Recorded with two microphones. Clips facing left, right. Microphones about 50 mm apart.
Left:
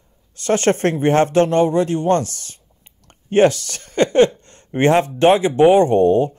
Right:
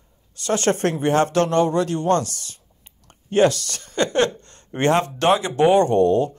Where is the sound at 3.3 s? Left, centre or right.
Left.